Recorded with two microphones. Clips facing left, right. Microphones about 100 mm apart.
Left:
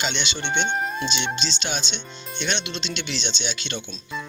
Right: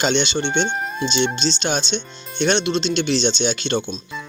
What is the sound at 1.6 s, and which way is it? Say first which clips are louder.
Speech: right 7 dB; 35° right (ahead or behind).